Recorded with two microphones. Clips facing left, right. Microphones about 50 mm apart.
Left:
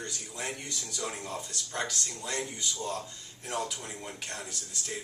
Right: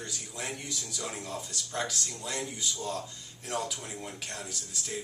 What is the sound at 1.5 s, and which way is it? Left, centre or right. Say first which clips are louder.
A man's voice: right 2 dB; centre.